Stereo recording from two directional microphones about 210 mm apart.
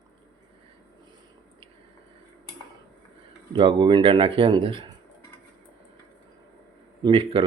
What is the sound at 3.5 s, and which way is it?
Speech, 25° right (ahead or behind).